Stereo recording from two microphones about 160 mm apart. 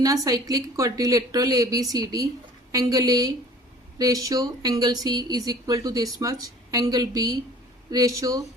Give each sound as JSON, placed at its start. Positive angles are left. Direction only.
{"t": 0.0, "sound": "speech", "side_deg": -20}